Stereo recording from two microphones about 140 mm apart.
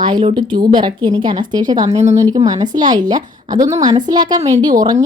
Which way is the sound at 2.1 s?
25° right (ahead or behind).